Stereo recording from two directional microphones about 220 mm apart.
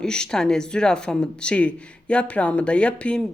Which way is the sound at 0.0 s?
5° left (ahead or behind).